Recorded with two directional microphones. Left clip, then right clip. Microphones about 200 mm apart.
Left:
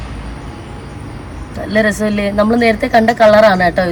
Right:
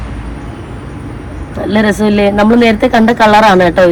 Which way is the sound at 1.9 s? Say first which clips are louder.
Right 6 dB; 40° left (ahead or behind).